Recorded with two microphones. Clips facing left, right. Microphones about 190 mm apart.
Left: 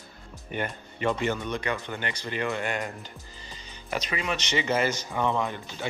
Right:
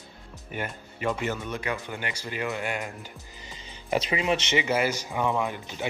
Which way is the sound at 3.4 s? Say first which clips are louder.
Right 1 dB; 20° right (ahead or behind).